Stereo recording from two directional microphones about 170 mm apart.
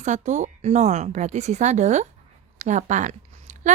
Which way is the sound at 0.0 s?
45° right (ahead or behind).